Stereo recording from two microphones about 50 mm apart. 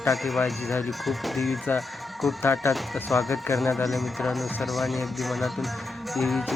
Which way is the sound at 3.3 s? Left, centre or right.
Left.